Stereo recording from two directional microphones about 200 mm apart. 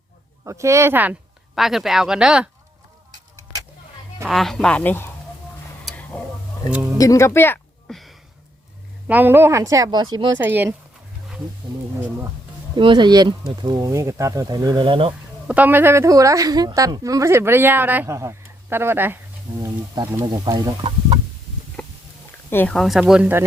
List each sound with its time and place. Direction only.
0.4 s a woman's voice: 15° right (ahead or behind)
4.3 s speech: centre (ahead or behind)
5.8 s a sound: 5° left (ahead or behind)
7.0 s speech: 15° left (ahead or behind)
9.0 s a woman's voice: 10° right (ahead or behind)
10.4 s a woman's voice: 10° right (ahead or behind)
12.7 s a woman's voice: 25° right (ahead or behind)
15.4 s a woman's voice: 10° right (ahead or behind)
21.8 s stomach rumble: 5° left (ahead or behind)
22.4 s speech: 10° left (ahead or behind); by 23.5 s 10° right (ahead or behind)